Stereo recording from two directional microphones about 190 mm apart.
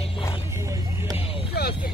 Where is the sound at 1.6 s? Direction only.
55° left (ahead or behind).